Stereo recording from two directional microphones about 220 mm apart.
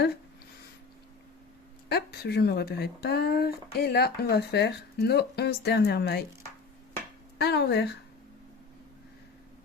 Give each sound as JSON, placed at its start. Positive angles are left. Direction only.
{"t": 1.9, "sound": "speech", "side_deg": 45}
{"t": 7.3, "sound": "speech", "side_deg": 50}